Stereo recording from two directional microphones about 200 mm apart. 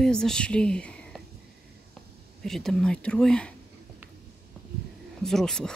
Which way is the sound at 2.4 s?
Centre (ahead or behind).